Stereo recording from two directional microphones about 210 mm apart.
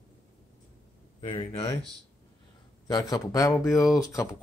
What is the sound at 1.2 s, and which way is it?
Speech, 25° left (ahead or behind).